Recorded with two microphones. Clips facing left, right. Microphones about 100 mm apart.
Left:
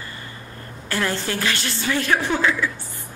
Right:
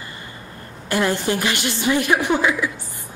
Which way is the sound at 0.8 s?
15° right (ahead or behind).